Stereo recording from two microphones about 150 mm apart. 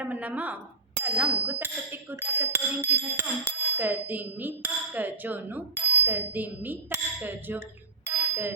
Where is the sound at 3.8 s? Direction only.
10° right (ahead or behind).